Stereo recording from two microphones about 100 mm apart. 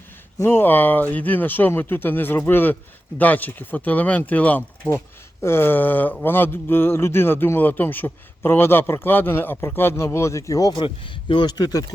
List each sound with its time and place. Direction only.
0.3 s a man's voice: 20° left (ahead or behind)
10.8 s speech: 55° left (ahead or behind)